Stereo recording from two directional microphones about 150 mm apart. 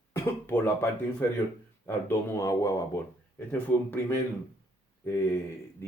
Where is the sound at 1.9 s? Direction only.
20° left (ahead or behind).